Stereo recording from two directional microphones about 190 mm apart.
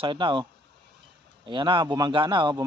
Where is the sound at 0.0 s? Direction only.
25° right (ahead or behind).